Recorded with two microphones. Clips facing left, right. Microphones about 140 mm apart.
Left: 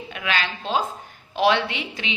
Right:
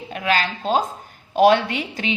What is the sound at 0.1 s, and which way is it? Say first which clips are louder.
A woman's voice: right 5 dB; 40° right (ahead or behind).